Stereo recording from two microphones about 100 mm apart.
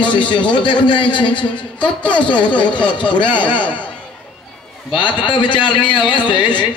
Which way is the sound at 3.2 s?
50° left (ahead or behind).